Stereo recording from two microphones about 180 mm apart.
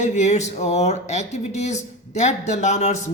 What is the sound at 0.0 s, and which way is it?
Speech, 40° left (ahead or behind).